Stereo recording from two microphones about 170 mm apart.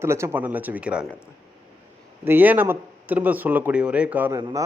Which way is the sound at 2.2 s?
10° right (ahead or behind).